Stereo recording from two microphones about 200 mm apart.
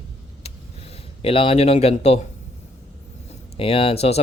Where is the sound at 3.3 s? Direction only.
30° left (ahead or behind).